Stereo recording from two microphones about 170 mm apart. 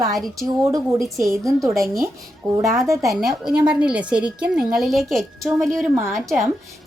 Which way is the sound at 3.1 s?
5° right (ahead or behind).